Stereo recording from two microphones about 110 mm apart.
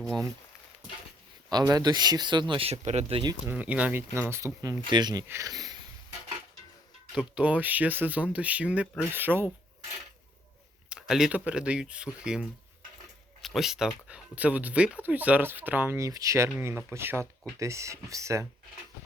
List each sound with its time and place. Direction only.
1.5 s speech: 35° right (ahead or behind)
2.6 s speech: 80° right
3.4 s speech: 10° right (ahead or behind)
4.3 s speech: 25° right (ahead or behind)
4.9 s speech: 40° right (ahead or behind)
7.1 s speech: 10° right (ahead or behind)
10.8 s a sound: 5° right (ahead or behind)
11.3 s speech: 10° right (ahead or behind)
16.0 s speech: 30° right (ahead or behind)